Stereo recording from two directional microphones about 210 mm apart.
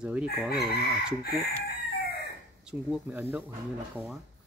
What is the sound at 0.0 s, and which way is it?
Speech, 5° right (ahead or behind).